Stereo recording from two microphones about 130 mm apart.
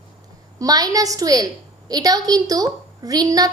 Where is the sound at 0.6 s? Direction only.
30° right (ahead or behind).